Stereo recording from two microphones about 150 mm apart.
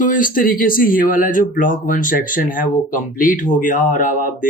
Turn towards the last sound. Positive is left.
turn(degrees=60)  # may be behind; listen again after turning